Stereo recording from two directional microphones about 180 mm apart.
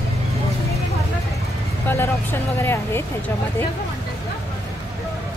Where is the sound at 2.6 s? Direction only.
15° left (ahead or behind).